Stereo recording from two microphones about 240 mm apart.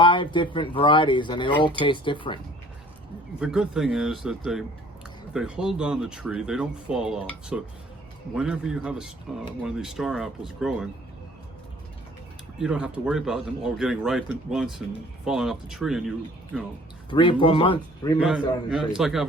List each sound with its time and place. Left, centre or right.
0.0 s speech: centre
3.4 s speech: centre
12.5 s speech: centre
17.1 s speech: centre
18.2 s speech: centre